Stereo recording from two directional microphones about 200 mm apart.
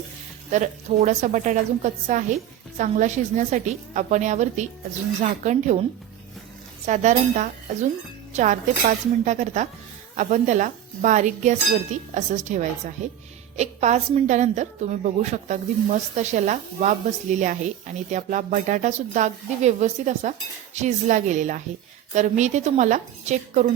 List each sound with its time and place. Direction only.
0.5 s a woman's voice: 35° right (ahead or behind)
6.8 s a woman's voice: 35° right (ahead or behind)